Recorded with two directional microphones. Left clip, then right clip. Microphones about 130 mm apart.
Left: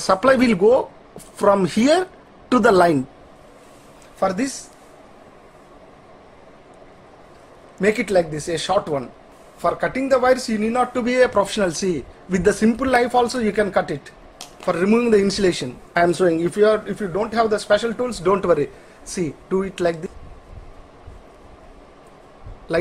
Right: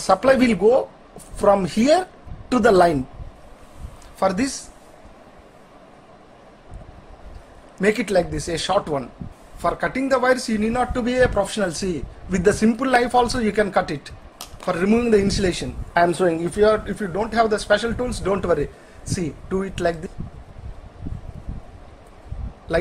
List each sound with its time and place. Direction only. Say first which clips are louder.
0.0 s speech: even; 20° left (ahead or behind)
4.2 s speech: even; 30° right (ahead or behind)
7.7 s a man's voice: left 1 dB; 10° right (ahead or behind)
10.9 s a man's voice: left 1 dB; 15° left (ahead or behind); by 14.1 s 5° right (ahead or behind)
14.6 s a man's voice: left 2 dB; 5° left (ahead or behind)
18.2 s a man's voice: left 4 dB; 15° left (ahead or behind)
19.0 s a man's voice: left 3 dB; 5° left (ahead or behind)
22.7 s a man's voice: left 1 dB; centre (ahead or behind)